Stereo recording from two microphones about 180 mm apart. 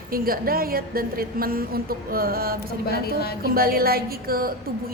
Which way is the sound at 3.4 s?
55° right (ahead or behind).